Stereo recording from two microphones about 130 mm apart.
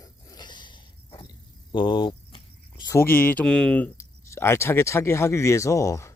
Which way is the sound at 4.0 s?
20° left (ahead or behind).